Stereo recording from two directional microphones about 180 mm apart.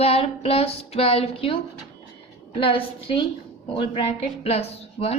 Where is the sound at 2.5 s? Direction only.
30° left (ahead or behind).